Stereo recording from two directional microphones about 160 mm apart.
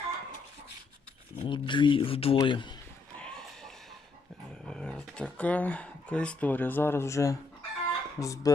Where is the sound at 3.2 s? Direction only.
5° left (ahead or behind).